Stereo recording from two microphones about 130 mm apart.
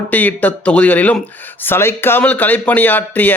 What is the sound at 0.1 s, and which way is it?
A man's voice, 10° left (ahead or behind).